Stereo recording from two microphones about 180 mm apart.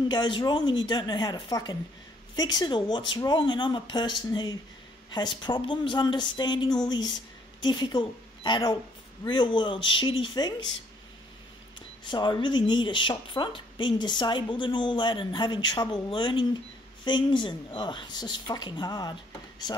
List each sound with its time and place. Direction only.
0.1 s a woman's voice: 25° left (ahead or behind)
12.0 s speech: 25° left (ahead or behind)